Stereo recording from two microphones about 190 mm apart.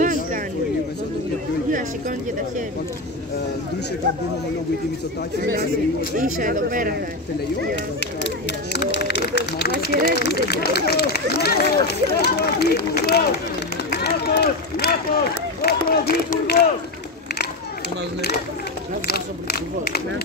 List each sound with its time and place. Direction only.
0.0 s a sound: 40° right (ahead or behind)
1.7 s speech: 45° right (ahead or behind)
6.1 s speech: 45° right (ahead or behind)
8.7 s speech: 65° left (ahead or behind)
13.8 s run: 60° left (ahead or behind)
15.6 s speech: 55° left (ahead or behind)
19.0 s speech: 55° left (ahead or behind)